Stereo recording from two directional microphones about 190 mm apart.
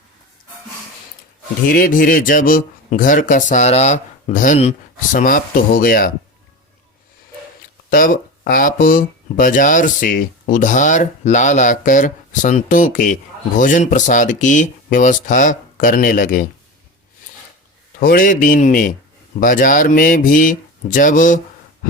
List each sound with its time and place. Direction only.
1.7 s speech: 45° left (ahead or behind)
7.9 s speech: 45° left (ahead or behind)
18.0 s speech: 50° left (ahead or behind)